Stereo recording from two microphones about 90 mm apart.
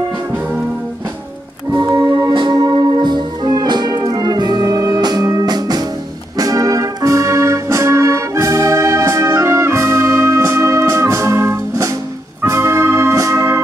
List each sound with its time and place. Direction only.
1.7 s music: 40° right (ahead or behind)
2.3 s music: 60° right (ahead or behind); by 13.6 s 35° right (ahead or behind)